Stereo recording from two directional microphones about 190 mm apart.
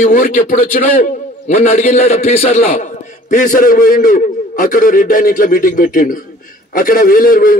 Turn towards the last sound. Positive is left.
turn(degrees=45)  # may be behind; listen again after turning